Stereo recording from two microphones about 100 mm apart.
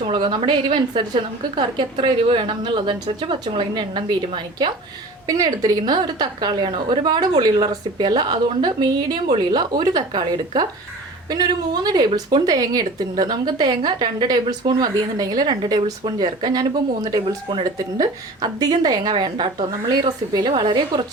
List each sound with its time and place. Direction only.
0.0 s a woman's voice: 55° right (ahead or behind)
5.3 s a woman's voice: 40° right (ahead or behind)